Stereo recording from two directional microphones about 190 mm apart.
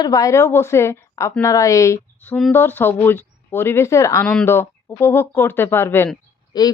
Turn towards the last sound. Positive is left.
turn(degrees=20)  # may be behind; listen again after turning